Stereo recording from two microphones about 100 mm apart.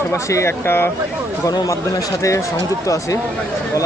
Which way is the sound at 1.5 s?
35° left (ahead or behind).